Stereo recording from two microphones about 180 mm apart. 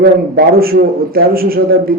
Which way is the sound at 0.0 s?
55° right (ahead or behind).